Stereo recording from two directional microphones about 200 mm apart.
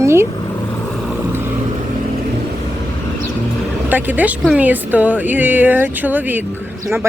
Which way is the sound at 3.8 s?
10° right (ahead or behind).